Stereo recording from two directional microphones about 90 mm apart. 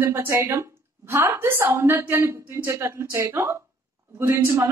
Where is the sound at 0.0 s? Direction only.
25° right (ahead or behind).